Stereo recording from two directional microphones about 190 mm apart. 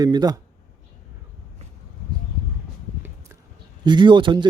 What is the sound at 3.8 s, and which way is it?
Speech, 25° right (ahead or behind).